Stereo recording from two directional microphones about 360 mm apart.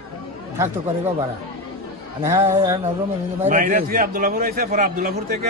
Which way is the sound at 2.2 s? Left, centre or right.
Centre.